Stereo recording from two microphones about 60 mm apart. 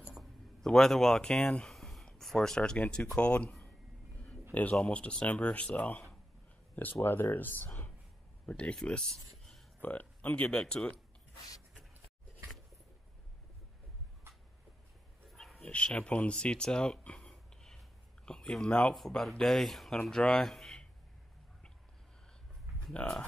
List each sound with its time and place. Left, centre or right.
0.1 s a sound: centre
0.7 s speech: centre
1.7 s a sound: centre
3.2 s speech: left
4.7 s speech: left
8.5 s speech: centre
9.8 s speech: left
10.6 s speech: centre
15.2 s dog: centre
15.6 s speech: centre
17.2 s a sound: centre
18.9 s speech: centre
22.9 s speech: centre